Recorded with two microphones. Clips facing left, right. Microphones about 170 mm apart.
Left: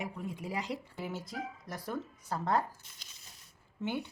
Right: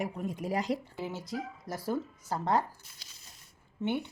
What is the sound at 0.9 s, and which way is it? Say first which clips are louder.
A woman's voice: right 3 dB; 25° right (ahead or behind).